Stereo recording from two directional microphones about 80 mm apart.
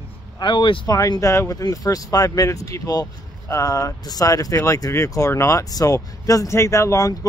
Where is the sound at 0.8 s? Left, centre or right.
Left.